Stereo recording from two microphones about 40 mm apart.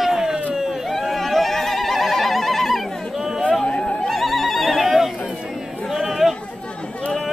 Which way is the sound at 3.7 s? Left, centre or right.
Left.